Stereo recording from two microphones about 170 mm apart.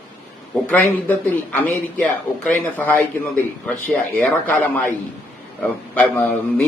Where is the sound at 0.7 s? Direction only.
10° left (ahead or behind).